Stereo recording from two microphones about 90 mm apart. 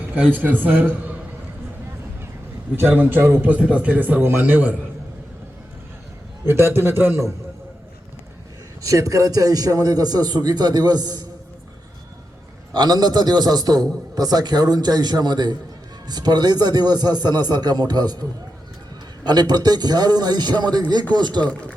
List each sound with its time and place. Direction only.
0.3 s a man's voice: 20° right (ahead or behind)
2.7 s a man's voice: 25° right (ahead or behind)
6.4 s a man's voice: 25° right (ahead or behind)
8.8 s a man's voice: 40° right (ahead or behind)
12.7 s a man's voice: 50° right (ahead or behind)